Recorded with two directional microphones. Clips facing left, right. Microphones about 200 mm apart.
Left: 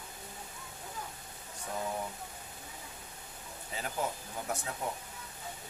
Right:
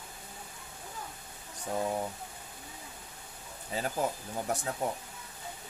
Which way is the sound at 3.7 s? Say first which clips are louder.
Right 6 dB; 35° right (ahead or behind).